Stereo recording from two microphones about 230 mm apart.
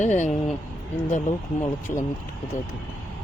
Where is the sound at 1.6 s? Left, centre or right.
Centre.